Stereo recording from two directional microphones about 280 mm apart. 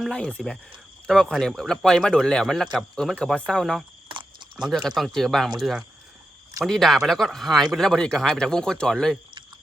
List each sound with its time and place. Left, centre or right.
0.0 s speech: centre